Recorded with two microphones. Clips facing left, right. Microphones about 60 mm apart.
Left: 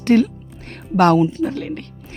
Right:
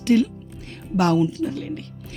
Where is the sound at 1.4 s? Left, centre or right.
Left.